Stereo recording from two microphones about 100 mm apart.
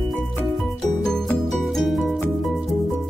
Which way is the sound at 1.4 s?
Centre (ahead or behind).